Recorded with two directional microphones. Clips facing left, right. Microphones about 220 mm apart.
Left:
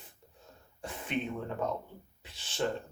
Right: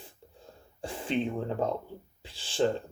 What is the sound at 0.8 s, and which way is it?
Speech, 30° right (ahead or behind).